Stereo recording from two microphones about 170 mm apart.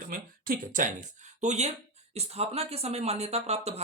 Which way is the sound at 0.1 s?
55° right (ahead or behind).